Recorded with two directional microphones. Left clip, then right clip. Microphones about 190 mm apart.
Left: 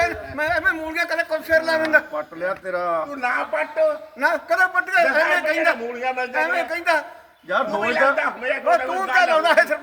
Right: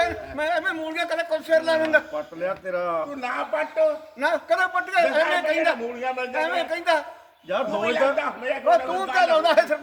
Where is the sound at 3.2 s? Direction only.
5° left (ahead or behind).